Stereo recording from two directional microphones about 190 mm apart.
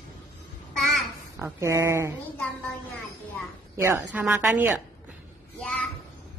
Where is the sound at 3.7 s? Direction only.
15° right (ahead or behind).